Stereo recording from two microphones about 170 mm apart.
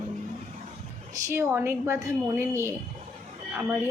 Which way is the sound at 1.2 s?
15° right (ahead or behind).